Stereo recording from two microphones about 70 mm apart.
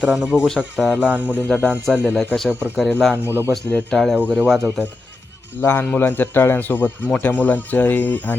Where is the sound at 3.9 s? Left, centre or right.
Centre.